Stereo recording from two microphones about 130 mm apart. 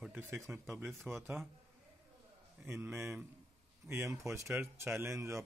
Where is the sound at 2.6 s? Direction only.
20° right (ahead or behind).